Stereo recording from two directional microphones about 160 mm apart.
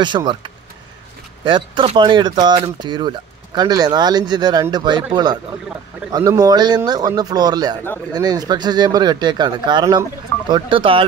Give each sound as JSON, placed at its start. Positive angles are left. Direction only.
{"t": 0.0, "sound": "speech", "side_deg": -30}